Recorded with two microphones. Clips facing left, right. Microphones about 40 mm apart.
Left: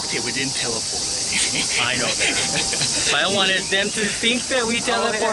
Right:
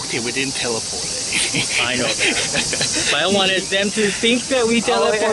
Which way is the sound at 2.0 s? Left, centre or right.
Right.